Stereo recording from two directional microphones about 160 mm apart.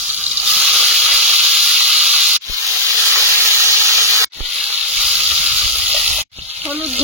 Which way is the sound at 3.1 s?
15° right (ahead or behind).